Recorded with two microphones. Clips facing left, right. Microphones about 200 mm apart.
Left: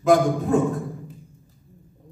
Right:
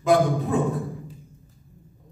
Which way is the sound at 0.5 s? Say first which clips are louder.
Left 4 dB; 45° left (ahead or behind).